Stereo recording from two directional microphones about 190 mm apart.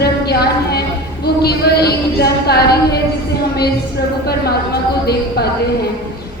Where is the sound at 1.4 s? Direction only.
55° left (ahead or behind).